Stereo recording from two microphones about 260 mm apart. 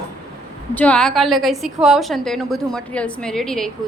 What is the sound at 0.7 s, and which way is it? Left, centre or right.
A woman's voice, centre.